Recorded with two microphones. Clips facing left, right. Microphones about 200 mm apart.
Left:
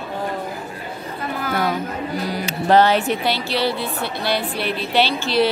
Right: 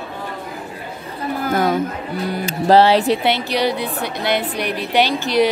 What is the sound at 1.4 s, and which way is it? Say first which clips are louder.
Chatter: right 4 dB; 45° right (ahead or behind).